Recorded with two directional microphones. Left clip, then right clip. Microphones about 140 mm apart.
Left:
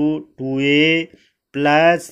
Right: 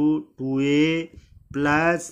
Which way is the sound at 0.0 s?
10° left (ahead or behind).